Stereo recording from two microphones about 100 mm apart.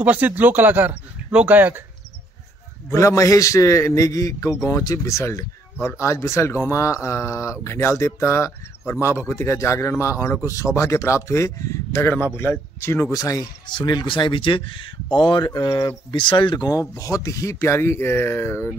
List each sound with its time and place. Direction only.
0.0 s speech: 15° right (ahead or behind)
2.9 s a man's voice: 30° left (ahead or behind); by 16.5 s 55° left (ahead or behind)
16.5 s a man's voice: 40° left (ahead or behind)